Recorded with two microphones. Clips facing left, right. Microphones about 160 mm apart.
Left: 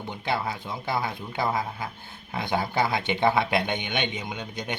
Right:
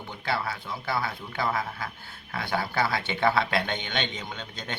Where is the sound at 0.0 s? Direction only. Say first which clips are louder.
Left 2 dB; 20° left (ahead or behind).